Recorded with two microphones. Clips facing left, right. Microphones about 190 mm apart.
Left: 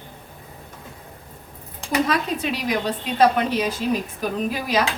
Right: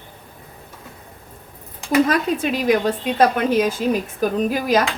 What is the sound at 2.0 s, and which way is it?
A woman's voice, 50° right (ahead or behind).